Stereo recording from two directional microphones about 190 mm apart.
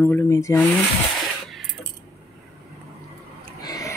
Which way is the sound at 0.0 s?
15° left (ahead or behind).